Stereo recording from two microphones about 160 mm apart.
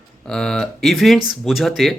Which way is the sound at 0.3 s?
5° left (ahead or behind).